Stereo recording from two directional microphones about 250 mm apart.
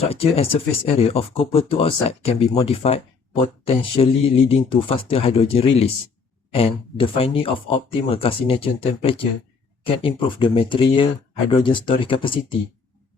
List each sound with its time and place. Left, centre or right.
0.0 s speech: left